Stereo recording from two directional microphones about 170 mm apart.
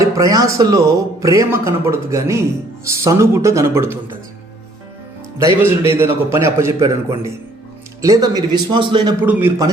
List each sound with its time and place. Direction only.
0.0 s speech: 20° right (ahead or behind)
5.4 s speech: 15° right (ahead or behind)
8.0 s a man's voice: 20° right (ahead or behind)
9.2 s speech: 10° right (ahead or behind)